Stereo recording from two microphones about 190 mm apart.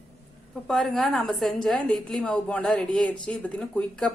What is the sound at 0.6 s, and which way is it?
A woman's voice, centre (ahead or behind).